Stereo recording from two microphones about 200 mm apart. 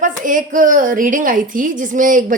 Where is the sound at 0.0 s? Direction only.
40° right (ahead or behind).